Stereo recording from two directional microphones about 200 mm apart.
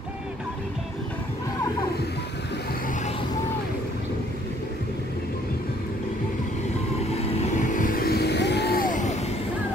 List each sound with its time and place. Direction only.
7.0 s vehicle: 30° left (ahead or behind)